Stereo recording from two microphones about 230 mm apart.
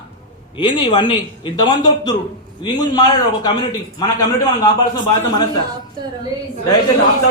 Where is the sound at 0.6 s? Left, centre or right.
Centre.